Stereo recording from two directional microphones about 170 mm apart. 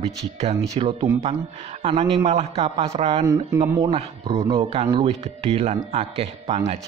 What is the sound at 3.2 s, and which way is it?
Speech, 20° right (ahead or behind).